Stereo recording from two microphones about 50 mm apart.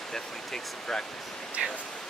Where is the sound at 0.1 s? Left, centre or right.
Centre.